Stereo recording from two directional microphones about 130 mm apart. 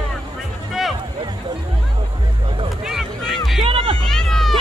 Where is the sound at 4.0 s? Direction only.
5° left (ahead or behind).